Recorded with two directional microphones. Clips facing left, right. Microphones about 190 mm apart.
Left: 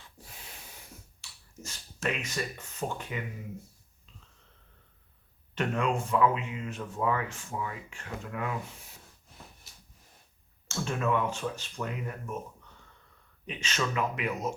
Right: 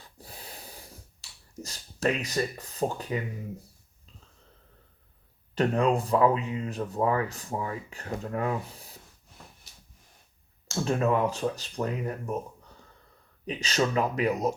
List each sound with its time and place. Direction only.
0.0 s snort: 35° right (ahead or behind)
1.2 s finger snapping: 35° right (ahead or behind)
1.5 s speech: 35° right (ahead or behind)
5.5 s speech: 35° right (ahead or behind)
10.8 s speech: 35° right (ahead or behind)